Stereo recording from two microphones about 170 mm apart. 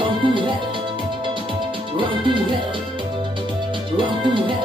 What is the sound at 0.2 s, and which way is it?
Music, 30° right (ahead or behind).